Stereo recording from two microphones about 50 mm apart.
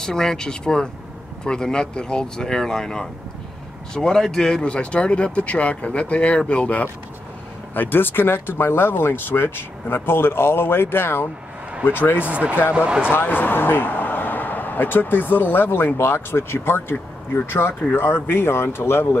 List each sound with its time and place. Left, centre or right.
0.0 s speech: centre; by 6.9 s left
7.7 s speech: left
12.3 s speech: right
13.1 s a man's voice: left